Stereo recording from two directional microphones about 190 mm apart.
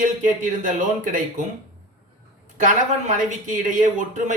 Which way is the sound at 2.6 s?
40° right (ahead or behind).